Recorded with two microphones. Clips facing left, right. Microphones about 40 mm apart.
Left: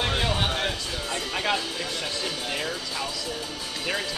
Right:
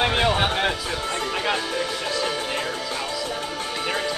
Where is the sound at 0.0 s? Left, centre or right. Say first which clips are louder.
Right 5 dB; right.